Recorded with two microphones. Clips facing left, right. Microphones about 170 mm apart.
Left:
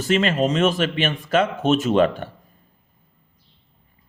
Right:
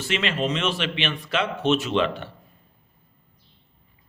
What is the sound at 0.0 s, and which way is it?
A man's voice, 45° left (ahead or behind).